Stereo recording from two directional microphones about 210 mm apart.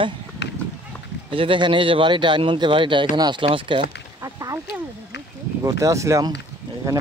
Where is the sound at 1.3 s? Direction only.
25° right (ahead or behind).